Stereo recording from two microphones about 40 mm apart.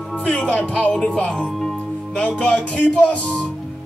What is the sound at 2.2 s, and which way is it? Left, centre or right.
Music, left.